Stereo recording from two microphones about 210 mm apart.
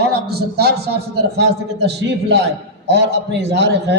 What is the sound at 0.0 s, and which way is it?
A man's voice, 50° right (ahead or behind).